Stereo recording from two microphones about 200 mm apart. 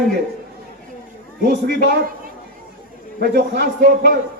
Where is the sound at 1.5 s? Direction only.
55° right (ahead or behind).